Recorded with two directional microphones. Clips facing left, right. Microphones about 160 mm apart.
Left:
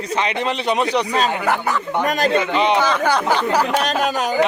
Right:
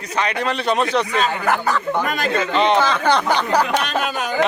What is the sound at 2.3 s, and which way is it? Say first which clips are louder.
A man's voice: right 3 dB; 20° left (ahead or behind).